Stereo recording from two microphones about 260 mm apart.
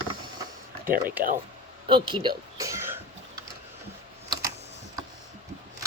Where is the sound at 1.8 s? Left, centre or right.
Centre.